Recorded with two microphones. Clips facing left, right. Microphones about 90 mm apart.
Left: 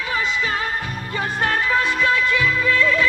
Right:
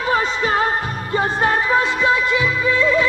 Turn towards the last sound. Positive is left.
turn(degrees=-20)  # may be behind; listen again after turning